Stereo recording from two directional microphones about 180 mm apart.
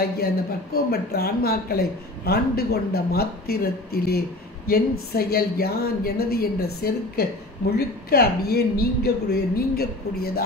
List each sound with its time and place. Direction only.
0.8 s a man's voice: 60° left (ahead or behind)